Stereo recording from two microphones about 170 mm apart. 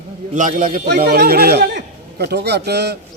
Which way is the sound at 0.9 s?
65° right (ahead or behind).